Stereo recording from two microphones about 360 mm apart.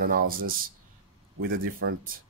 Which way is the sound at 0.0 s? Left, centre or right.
Right.